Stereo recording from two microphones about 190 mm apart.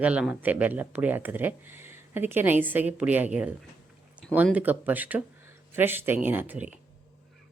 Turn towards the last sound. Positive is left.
turn(degrees=-10)  # may be behind; listen again after turning